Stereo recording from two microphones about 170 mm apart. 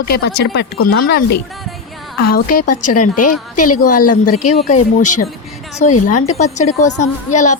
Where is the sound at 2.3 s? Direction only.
50° left (ahead or behind).